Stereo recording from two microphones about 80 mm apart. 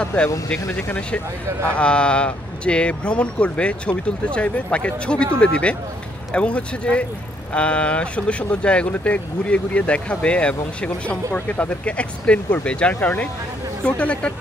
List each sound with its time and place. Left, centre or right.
0.0 s speech: centre